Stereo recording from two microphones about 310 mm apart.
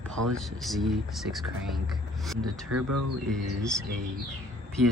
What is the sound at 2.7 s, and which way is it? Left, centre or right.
Speech, right.